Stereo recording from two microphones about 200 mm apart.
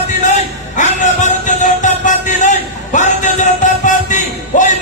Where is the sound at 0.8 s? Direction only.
35° left (ahead or behind).